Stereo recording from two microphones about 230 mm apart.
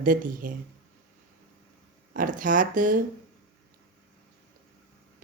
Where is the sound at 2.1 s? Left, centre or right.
Right.